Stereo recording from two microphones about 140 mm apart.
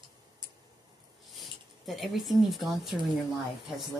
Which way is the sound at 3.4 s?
Centre (ahead or behind).